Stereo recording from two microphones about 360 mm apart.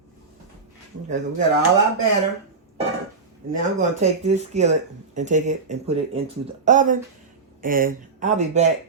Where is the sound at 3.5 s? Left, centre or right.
Centre.